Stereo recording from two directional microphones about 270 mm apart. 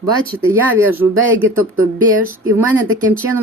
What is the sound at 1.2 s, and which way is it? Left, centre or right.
Speech, right.